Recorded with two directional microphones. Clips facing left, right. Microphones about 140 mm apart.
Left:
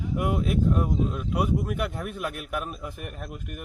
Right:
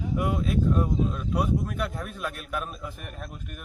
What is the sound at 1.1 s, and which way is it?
Speech, 15° left (ahead or behind).